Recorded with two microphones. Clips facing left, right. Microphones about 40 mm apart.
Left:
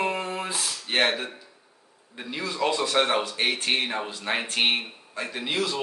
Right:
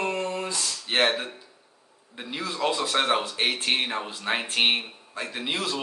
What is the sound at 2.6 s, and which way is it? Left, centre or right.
Speech, centre.